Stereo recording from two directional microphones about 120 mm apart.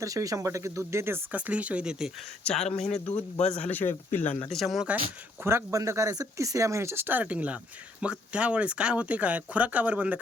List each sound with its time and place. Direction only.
0.0 s speech: 25° right (ahead or behind); by 2.0 s 5° right (ahead or behind)
2.4 s a man's voice: 5° left (ahead or behind)
2.6 s speech: 70° left (ahead or behind)
3.7 s a man's voice: 15° left (ahead or behind)
4.4 s speech: centre (ahead or behind)
5.4 s speech: 20° right (ahead or behind)